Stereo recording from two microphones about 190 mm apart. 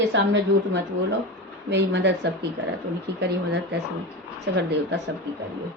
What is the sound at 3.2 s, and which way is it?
Speech, 60° right (ahead or behind).